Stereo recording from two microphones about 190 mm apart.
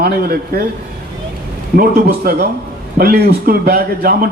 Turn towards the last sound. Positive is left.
turn(degrees=-55)  # may be behind; listen again after turning